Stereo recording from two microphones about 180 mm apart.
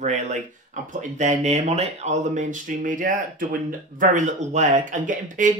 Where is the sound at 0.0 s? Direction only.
40° right (ahead or behind).